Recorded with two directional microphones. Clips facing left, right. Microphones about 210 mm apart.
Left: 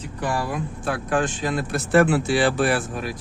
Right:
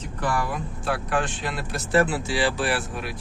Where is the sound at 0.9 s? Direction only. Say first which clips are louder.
Left 3 dB; 45° left (ahead or behind).